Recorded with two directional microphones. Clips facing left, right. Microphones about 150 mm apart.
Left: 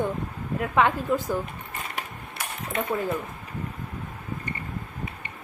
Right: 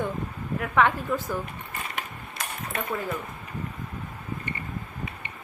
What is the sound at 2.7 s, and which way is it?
Speech, 20° left (ahead or behind).